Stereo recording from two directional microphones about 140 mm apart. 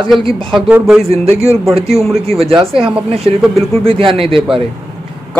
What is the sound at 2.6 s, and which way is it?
Speech, 40° right (ahead or behind).